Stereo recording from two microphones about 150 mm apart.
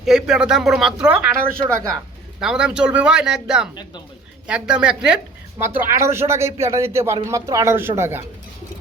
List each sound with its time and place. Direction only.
0.0 s speech: 5° right (ahead or behind)
2.4 s speech: 5° right (ahead or behind)